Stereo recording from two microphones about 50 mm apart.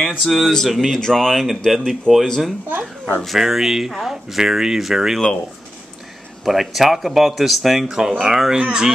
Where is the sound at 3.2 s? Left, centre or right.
Centre.